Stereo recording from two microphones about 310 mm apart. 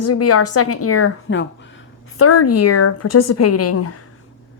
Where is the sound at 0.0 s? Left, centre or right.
Left.